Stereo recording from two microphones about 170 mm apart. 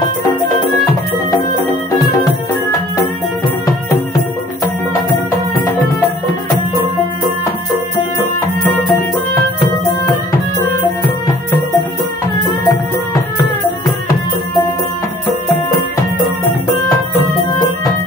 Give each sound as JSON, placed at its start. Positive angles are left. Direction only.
{"t": 12.6, "sound": "music", "side_deg": 25}